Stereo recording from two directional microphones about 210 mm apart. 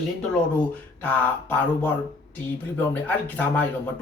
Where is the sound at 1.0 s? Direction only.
10° left (ahead or behind).